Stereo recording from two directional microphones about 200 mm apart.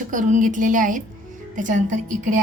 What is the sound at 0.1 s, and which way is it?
A woman's voice, 40° right (ahead or behind).